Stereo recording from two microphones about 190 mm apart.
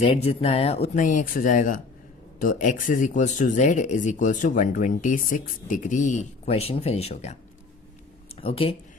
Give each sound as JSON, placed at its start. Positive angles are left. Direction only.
{"t": 0.0, "sound": "speech", "side_deg": 30}
{"t": 8.4, "sound": "speech", "side_deg": 30}